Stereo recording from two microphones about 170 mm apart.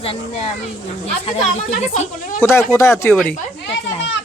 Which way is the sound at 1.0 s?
35° left (ahead or behind).